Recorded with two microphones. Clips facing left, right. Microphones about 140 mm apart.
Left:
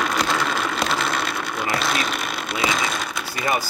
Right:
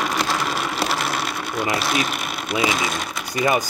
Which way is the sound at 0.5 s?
5° right (ahead or behind).